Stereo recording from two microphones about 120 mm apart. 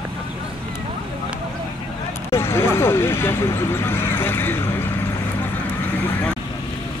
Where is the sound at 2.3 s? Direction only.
20° left (ahead or behind).